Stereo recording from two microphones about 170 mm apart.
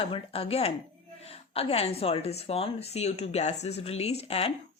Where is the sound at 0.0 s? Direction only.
35° left (ahead or behind).